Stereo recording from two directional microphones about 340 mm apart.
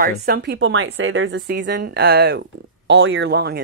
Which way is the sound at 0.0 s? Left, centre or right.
Right.